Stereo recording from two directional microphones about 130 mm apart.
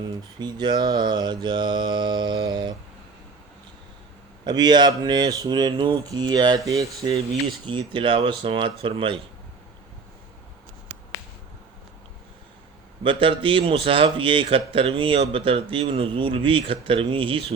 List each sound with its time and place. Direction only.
0.0 s mantra: 35° right (ahead or behind)
4.4 s mantra: 35° right (ahead or behind)
7.7 s mantra: 40° right (ahead or behind)
13.0 s mantra: 40° right (ahead or behind)
15.2 s speech: 45° right (ahead or behind)